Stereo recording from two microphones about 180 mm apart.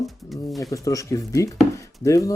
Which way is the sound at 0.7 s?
20° left (ahead or behind).